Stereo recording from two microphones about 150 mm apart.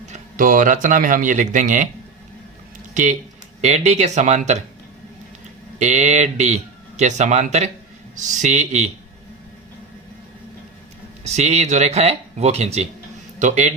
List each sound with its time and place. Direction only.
0.1 s speech: 65° right (ahead or behind)
2.9 s a man's voice: 55° right (ahead or behind)
5.8 s a man's voice: 50° right (ahead or behind)
11.2 s a man's voice: 50° right (ahead or behind)